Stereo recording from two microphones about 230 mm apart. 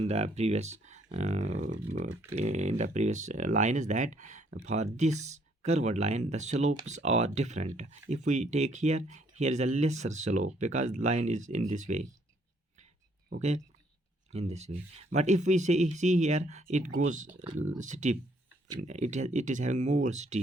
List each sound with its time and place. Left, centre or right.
0.0 s speech: right
14.3 s speech: right